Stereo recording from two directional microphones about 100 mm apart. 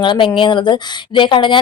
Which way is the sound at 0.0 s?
55° left (ahead or behind).